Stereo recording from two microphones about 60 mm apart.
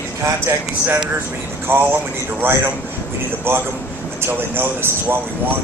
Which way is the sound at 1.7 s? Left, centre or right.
Right.